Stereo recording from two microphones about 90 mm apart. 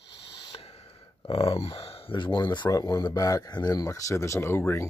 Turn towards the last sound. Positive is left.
turn(degrees=30)  # may be behind; listen again after turning